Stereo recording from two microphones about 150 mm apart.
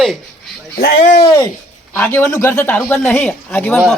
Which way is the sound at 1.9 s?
15° left (ahead or behind).